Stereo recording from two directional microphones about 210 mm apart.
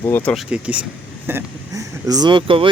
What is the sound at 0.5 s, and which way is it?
Speech, 5° right (ahead or behind).